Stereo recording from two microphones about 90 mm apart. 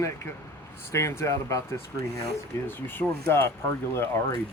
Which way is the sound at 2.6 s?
25° left (ahead or behind).